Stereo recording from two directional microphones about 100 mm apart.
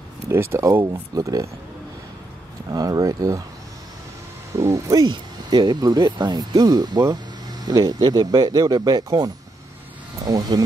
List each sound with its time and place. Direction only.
0.3 s speech: 25° right (ahead or behind)
2.7 s speech: 35° right (ahead or behind)
4.6 s speech: 30° right (ahead or behind)
5.0 s speech: 50° right (ahead or behind)